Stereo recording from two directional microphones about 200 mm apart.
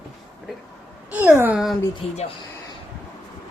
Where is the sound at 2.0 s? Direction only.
30° left (ahead or behind).